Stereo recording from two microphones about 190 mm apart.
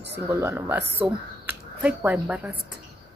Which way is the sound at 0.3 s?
15° right (ahead or behind).